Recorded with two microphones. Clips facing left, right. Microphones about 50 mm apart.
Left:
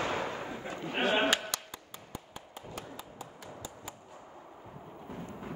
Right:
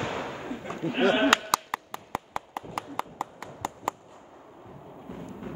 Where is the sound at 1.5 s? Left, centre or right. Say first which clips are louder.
Right 14 dB; right.